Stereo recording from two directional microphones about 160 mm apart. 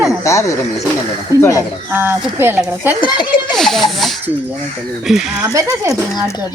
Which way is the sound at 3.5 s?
Centre (ahead or behind).